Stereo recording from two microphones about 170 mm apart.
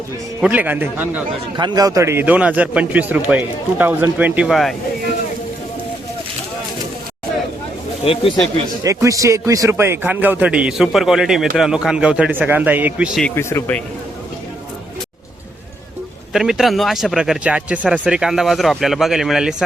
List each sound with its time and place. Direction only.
0.4 s a man's voice: 10° right (ahead or behind)
1.5 s a man's voice: 25° right (ahead or behind); by 4.7 s centre (ahead or behind)
8.0 s speech: 35° left (ahead or behind)
8.8 s a man's voice: 20° right (ahead or behind)
13.3 s speech: 15° left (ahead or behind)
16.3 s speech: centre (ahead or behind)